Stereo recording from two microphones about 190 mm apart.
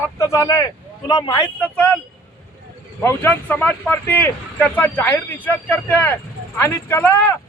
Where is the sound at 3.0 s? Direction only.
10° left (ahead or behind).